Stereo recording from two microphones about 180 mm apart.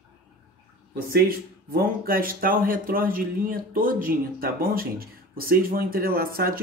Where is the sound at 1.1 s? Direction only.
55° right (ahead or behind).